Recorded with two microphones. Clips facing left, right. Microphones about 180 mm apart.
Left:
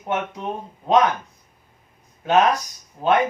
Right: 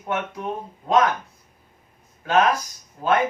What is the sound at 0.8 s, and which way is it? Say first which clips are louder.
Speech: left 2 dB; 25° left (ahead or behind).